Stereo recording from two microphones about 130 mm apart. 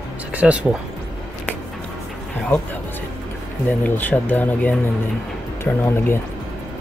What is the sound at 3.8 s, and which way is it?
Speech, 15° left (ahead or behind).